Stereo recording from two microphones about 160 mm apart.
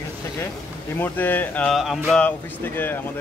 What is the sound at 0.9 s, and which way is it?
Speech, 10° left (ahead or behind).